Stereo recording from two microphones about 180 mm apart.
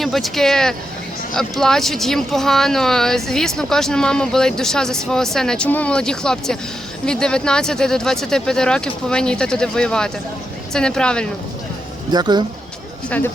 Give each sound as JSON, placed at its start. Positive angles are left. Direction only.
{"t": 0.0, "sound": "speech", "side_deg": 0}
{"t": 12.1, "sound": "speech", "side_deg": -25}
{"t": 13.1, "sound": "speech", "side_deg": 10}